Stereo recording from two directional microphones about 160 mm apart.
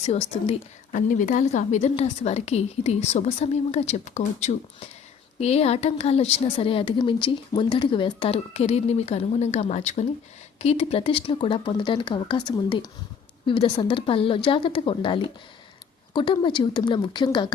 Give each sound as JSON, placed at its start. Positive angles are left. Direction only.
{"t": 0.0, "sound": "speech", "side_deg": 40}
{"t": 0.9, "sound": "a woman's voice", "side_deg": 50}